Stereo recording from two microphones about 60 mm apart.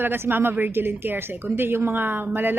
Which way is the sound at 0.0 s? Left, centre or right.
Right.